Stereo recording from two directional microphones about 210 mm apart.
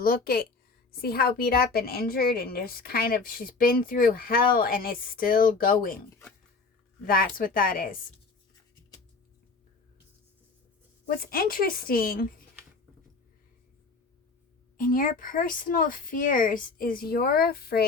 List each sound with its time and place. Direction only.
0.0 s a woman's voice: 45° left (ahead or behind)
7.0 s a woman's voice: 45° left (ahead or behind)
11.2 s a woman's voice: 45° left (ahead or behind)
14.8 s speech: 40° left (ahead or behind)